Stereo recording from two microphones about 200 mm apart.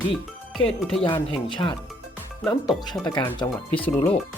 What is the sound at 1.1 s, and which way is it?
Speech, 25° left (ahead or behind).